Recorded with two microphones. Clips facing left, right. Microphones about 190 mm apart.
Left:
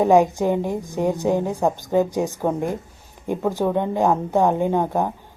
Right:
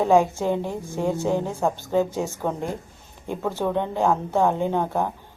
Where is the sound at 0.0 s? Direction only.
15° left (ahead or behind).